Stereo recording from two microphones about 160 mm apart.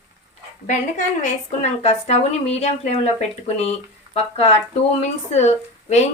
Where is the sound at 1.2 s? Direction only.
40° left (ahead or behind).